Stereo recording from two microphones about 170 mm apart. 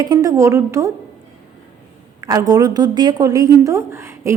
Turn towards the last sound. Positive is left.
turn(degrees=-15)  # may be behind; listen again after turning